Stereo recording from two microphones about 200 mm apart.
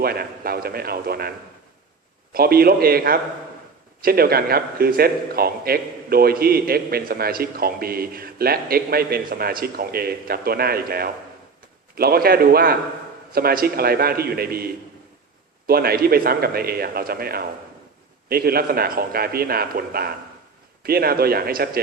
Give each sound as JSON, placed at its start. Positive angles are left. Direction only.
{"t": 0.0, "sound": "a man's voice", "side_deg": -50}
{"t": 2.3, "sound": "a man's voice", "side_deg": -50}